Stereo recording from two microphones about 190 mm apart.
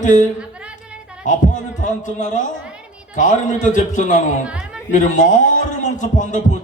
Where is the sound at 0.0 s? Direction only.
40° left (ahead or behind).